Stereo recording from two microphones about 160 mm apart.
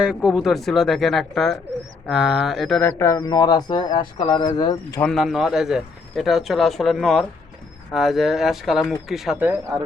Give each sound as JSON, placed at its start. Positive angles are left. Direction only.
{"t": 0.0, "sound": "speech", "side_deg": -5}
{"t": 3.0, "sound": "speech", "side_deg": 20}
{"t": 4.9, "sound": "speech", "side_deg": 5}